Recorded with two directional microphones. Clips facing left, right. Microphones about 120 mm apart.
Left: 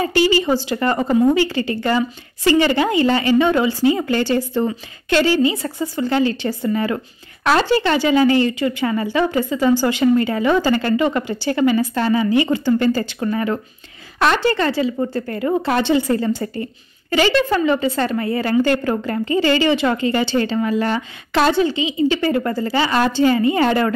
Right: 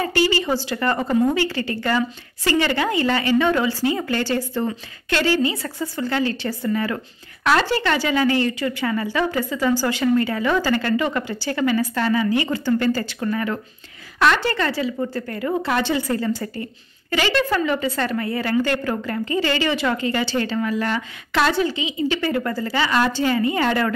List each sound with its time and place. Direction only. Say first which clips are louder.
0.0 s a woman's voice: left 4 dB; 20° left (ahead or behind)